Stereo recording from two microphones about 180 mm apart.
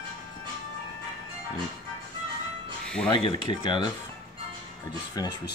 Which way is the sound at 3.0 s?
25° left (ahead or behind).